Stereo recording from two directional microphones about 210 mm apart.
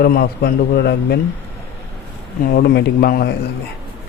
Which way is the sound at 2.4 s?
45° left (ahead or behind).